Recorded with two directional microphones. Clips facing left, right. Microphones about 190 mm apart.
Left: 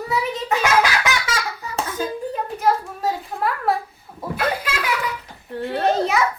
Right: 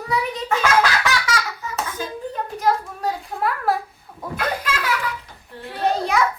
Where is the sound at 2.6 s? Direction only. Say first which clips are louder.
Even; 5° left (ahead or behind).